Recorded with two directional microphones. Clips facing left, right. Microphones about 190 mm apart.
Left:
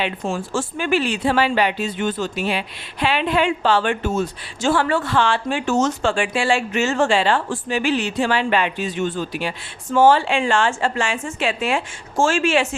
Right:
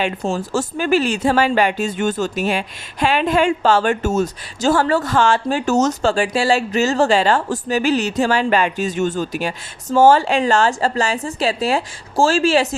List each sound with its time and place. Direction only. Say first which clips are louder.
0.3 s speech: right 3 dB; 40° right (ahead or behind)